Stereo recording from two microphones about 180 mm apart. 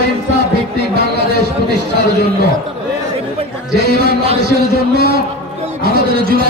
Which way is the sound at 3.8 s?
60° right (ahead or behind).